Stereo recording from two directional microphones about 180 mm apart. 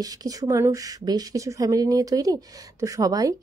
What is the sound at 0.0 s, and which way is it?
Speech, 20° right (ahead or behind).